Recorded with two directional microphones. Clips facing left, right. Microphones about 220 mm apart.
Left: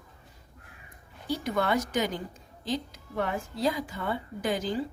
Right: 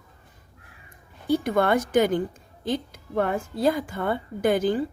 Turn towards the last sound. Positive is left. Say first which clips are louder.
# right 8 dB
turn(degrees=-55)  # may be behind; listen again after turning